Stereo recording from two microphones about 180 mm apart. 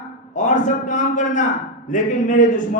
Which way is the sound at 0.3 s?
45° left (ahead or behind).